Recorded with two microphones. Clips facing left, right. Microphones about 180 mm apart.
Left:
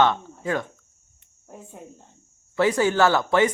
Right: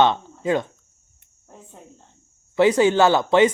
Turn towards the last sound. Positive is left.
turn(degrees=-20)  # may be behind; listen again after turning